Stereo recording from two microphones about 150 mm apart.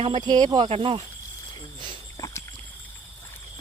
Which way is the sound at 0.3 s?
30° right (ahead or behind).